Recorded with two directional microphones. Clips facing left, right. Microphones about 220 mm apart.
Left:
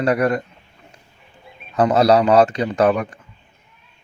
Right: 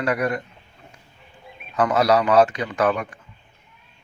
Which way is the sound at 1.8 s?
35° left (ahead or behind).